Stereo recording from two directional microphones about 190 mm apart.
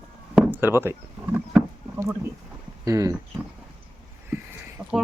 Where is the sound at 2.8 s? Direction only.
15° right (ahead or behind).